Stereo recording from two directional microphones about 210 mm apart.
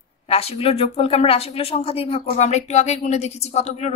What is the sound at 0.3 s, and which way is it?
Speech, 30° left (ahead or behind).